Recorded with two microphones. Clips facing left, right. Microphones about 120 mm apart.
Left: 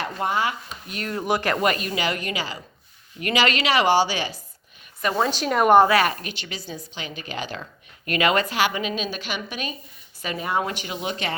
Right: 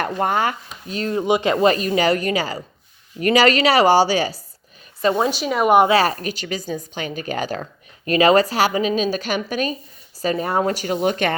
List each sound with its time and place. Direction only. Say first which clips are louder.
0.0 s speech: right 4 dB; 50° right (ahead or behind)
0.9 s speech: right 6 dB; 30° right (ahead or behind)
1.6 s a woman's voice: right 7 dB; 30° right (ahead or behind)
5.2 s a woman's voice: right 1 dB; 5° right (ahead or behind)
5.9 s a woman's voice: right 3 dB; 35° right (ahead or behind); by 11.3 s 50° right (ahead or behind)